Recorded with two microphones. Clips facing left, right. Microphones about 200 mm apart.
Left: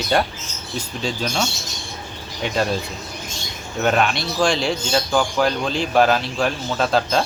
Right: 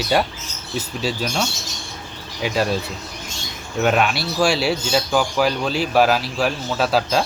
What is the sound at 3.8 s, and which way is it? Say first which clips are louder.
Speech: right 1 dB; 5° right (ahead or behind).